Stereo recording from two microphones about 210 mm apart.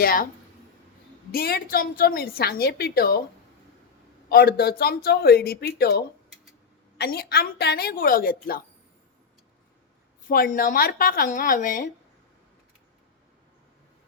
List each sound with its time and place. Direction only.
0.0 s a woman's voice: 45° left (ahead or behind)
1.3 s a woman's voice: 45° left (ahead or behind)
4.3 s a woman's voice: 45° left (ahead or behind)
10.2 s speech: 40° left (ahead or behind)